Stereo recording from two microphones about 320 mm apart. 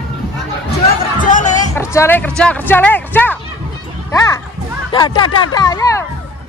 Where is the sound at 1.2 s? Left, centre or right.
Left.